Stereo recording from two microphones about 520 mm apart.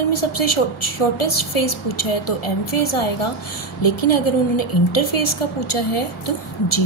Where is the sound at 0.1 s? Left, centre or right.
Left.